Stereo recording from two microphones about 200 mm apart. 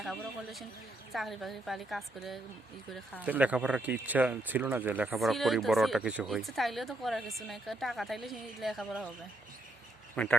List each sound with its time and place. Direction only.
0.0 s speech: centre (ahead or behind)
10.2 s speech: 5° left (ahead or behind)